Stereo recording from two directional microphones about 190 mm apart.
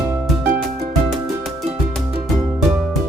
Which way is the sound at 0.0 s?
10° right (ahead or behind).